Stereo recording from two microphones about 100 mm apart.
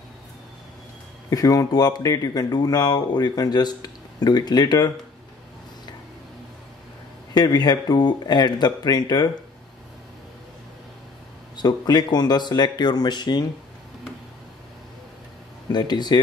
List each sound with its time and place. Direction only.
1.3 s speech: 35° left (ahead or behind)
7.3 s speech: 45° left (ahead or behind)
11.5 s speech: 45° left (ahead or behind)
15.7 s speech: 45° left (ahead or behind)